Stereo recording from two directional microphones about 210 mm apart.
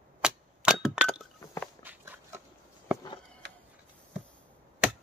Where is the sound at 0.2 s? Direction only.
5° right (ahead or behind).